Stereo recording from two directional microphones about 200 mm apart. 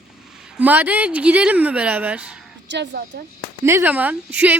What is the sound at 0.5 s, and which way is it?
Speech, 10° right (ahead or behind).